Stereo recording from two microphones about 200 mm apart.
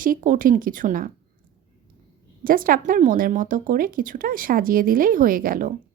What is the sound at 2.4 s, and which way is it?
A woman's voice, 45° right (ahead or behind).